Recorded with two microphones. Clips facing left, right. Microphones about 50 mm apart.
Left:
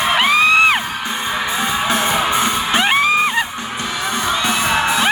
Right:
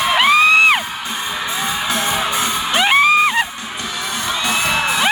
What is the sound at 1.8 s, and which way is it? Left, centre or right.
Music, left.